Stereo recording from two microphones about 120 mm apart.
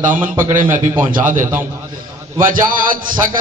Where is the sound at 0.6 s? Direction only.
20° right (ahead or behind).